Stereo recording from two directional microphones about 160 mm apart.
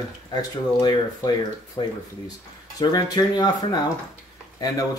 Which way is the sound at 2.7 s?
25° left (ahead or behind).